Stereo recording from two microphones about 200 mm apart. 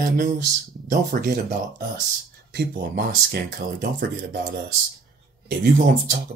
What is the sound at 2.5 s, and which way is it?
Speech, 50° right (ahead or behind).